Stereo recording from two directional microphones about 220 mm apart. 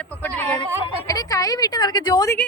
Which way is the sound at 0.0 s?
10° left (ahead or behind).